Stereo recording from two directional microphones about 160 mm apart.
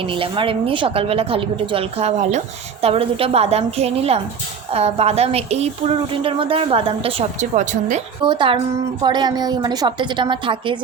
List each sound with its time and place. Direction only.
0.0 s a woman's voice: 35° right (ahead or behind); by 8.0 s 50° right (ahead or behind)
8.2 s a woman's voice: 30° right (ahead or behind)